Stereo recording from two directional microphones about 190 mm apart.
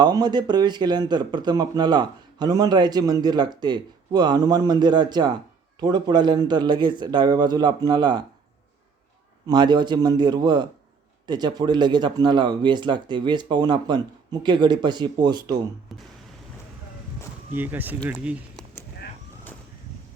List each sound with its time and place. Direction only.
0.0 s speech: 20° right (ahead or behind)
9.5 s speech: 25° right (ahead or behind)
15.9 s speech: centre (ahead or behind)
17.5 s speech: 10° right (ahead or behind)
18.5 s a sound: 10° left (ahead or behind)